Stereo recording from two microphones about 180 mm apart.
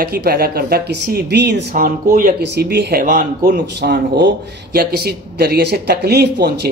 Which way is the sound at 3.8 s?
65° right (ahead or behind).